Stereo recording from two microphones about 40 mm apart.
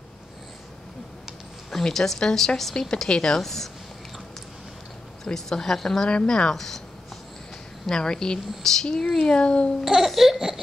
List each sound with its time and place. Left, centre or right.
1.7 s speech: centre
5.2 s speech: centre
7.9 s speech: centre
8.8 s a child's voice: left
9.8 s babbling: centre